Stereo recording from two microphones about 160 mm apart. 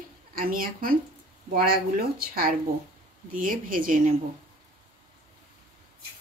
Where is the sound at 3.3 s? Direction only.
60° right (ahead or behind).